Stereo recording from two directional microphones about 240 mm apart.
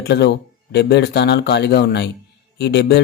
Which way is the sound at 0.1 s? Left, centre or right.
Left.